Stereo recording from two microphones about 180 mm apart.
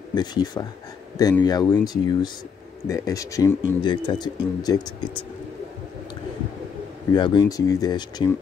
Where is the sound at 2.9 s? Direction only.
20° left (ahead or behind).